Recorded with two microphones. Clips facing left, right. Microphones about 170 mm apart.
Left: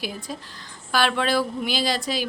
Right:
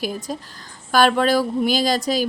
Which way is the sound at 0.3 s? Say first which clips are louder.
Right 5 dB; 45° right (ahead or behind).